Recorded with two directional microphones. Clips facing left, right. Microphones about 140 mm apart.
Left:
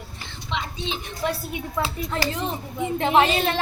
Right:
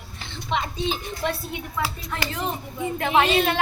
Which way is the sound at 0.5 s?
50° right (ahead or behind).